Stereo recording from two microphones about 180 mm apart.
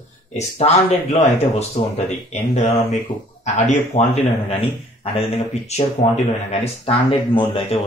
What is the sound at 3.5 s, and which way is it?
Speech, 40° left (ahead or behind).